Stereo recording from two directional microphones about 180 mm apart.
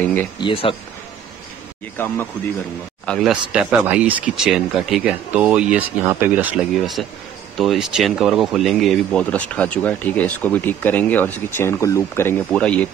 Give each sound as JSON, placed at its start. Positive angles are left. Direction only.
{"t": 0.4, "sound": "speech", "side_deg": 30}
{"t": 3.1, "sound": "speech", "side_deg": 0}